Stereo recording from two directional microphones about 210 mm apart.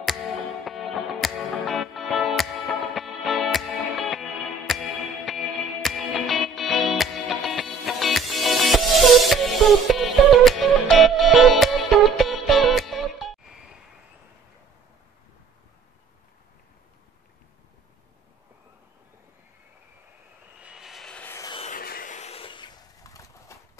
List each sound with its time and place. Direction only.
0.7 s music: centre (ahead or behind)
20.6 s vehicle: centre (ahead or behind); by 21.5 s 15° left (ahead or behind)
21.5 s a sound: 40° left (ahead or behind); by 23.6 s 15° left (ahead or behind)